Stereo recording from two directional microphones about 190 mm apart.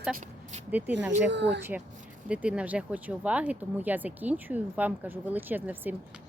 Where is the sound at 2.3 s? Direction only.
5° right (ahead or behind).